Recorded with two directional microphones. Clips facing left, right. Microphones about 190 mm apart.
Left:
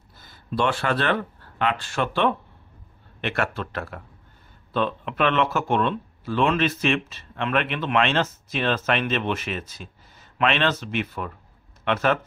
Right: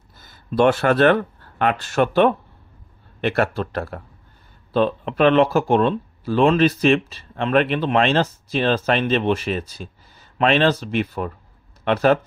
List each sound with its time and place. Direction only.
0.6 s speech: 45° right (ahead or behind)